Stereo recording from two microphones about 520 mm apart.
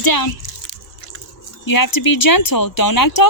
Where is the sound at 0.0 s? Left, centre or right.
Left.